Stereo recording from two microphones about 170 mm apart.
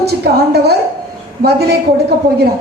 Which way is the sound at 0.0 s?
70° right (ahead or behind).